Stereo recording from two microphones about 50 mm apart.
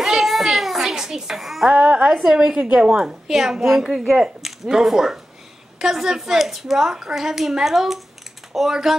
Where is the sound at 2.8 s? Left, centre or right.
Centre.